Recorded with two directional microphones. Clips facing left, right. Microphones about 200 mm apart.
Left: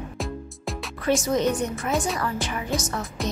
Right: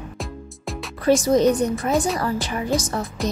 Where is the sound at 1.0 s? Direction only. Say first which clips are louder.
Right 6 dB; 35° right (ahead or behind).